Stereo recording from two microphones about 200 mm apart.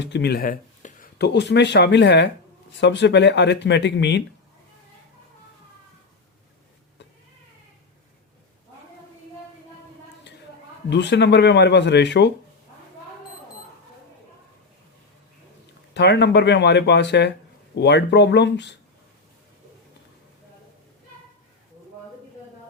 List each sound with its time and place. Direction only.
0.0 s speech: 60° left (ahead or behind)
10.8 s speech: 60° left (ahead or behind)
16.0 s speech: 60° left (ahead or behind)